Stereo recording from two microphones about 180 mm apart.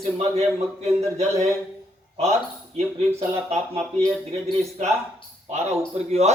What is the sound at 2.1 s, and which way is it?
Speech, 35° right (ahead or behind).